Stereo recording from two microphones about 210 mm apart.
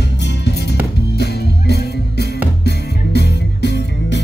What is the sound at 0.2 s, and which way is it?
Music, 55° left (ahead or behind).